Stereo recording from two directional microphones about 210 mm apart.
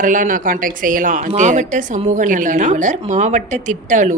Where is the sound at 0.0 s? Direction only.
40° right (ahead or behind).